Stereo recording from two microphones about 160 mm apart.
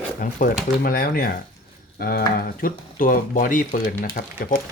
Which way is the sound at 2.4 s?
60° left (ahead or behind).